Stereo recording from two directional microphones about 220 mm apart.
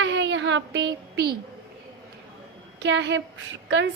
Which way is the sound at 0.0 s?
55° right (ahead or behind).